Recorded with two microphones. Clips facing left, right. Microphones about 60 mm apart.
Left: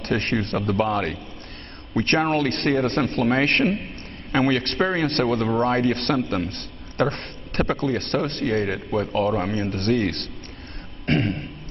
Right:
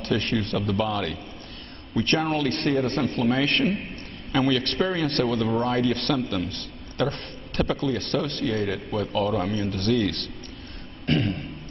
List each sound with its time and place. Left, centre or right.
0.0 s a man's voice: left
9.5 s a man's voice: left
11.1 s a sound: left